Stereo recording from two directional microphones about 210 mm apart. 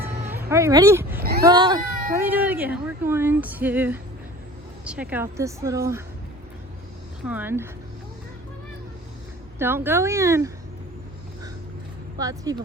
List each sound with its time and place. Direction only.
0.0 s a sound: 10° right (ahead or behind)
1.2 s a sound: 45° right (ahead or behind)
1.5 s speech: 20° right (ahead or behind)
2.1 s speech: 10° right (ahead or behind)
7.3 s speech: 10° right (ahead or behind)
9.6 s speech: 10° right (ahead or behind)
12.2 s speech: 15° right (ahead or behind)